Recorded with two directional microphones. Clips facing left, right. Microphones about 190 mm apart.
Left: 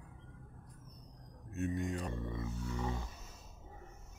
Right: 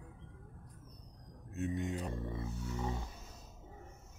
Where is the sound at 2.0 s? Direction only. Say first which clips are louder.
Even; 30° right (ahead or behind).